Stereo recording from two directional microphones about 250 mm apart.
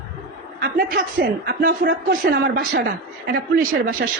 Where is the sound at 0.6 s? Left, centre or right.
Right.